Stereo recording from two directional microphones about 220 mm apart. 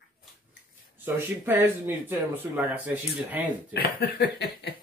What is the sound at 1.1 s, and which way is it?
Speech, 10° right (ahead or behind).